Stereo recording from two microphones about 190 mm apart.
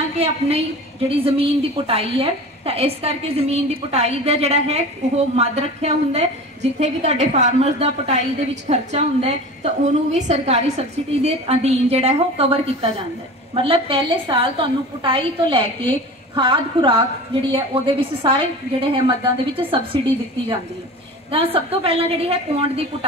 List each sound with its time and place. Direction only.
0.2 s a woman's voice: 30° right (ahead or behind)
13.6 s a woman's voice: 30° right (ahead or behind)
21.3 s a woman's voice: 30° right (ahead or behind)